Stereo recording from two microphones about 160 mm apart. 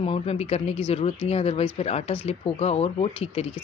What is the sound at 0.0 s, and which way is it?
Speech, 35° left (ahead or behind).